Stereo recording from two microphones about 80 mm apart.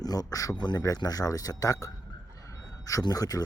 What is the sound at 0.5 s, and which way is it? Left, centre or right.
Speech, left.